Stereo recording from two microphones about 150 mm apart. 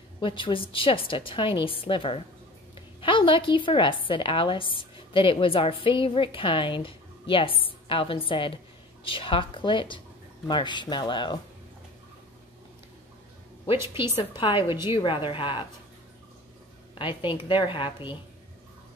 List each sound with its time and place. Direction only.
0.2 s a woman's voice: 35° left (ahead or behind)
14.3 s a woman's voice: 35° left (ahead or behind)
16.9 s a woman's voice: 35° left (ahead or behind)